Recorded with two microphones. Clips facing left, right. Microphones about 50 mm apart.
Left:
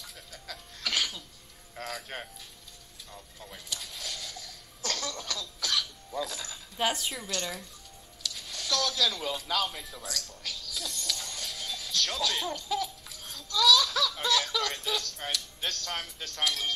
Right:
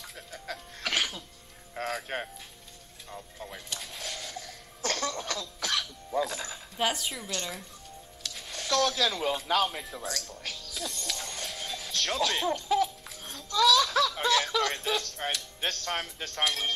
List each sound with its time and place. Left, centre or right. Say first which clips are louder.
0.0 s music: right 4 dB; right
3.1 s a sound: right 6 dB; right
5.6 s cough: left 2 dB; right
6.8 s a woman's voice: even; centre
8.2 s speech: even; right
10.4 s music: right 1 dB; right
12.5 s laughter: right 6 dB; right